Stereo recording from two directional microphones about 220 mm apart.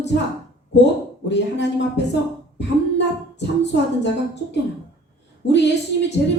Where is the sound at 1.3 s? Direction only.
50° left (ahead or behind).